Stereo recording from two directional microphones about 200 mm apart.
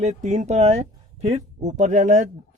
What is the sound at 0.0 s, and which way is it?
Speech, 35° right (ahead or behind).